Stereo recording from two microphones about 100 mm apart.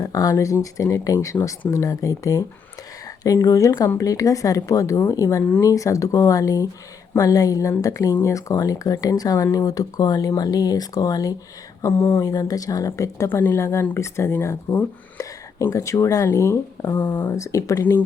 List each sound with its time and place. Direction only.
0.0 s speech: 35° left (ahead or behind)
11.8 s speech: 25° left (ahead or behind)
12.2 s speech: 35° left (ahead or behind)
17.0 s speech: 15° left (ahead or behind)
17.3 s speech: 30° left (ahead or behind)